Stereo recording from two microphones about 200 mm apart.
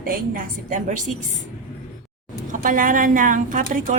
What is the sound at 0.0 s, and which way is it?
Speech, 40° right (ahead or behind).